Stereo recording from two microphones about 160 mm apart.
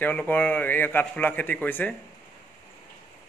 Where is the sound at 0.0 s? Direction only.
10° left (ahead or behind).